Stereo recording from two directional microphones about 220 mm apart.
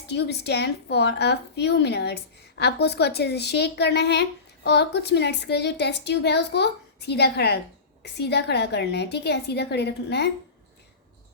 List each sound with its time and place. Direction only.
0.1 s a woman's voice: 50° left (ahead or behind)